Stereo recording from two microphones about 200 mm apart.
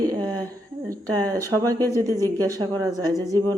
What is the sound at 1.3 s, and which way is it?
A woman's voice, 15° right (ahead or behind).